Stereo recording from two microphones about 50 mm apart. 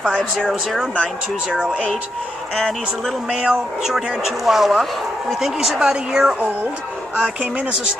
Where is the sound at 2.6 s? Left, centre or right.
Centre.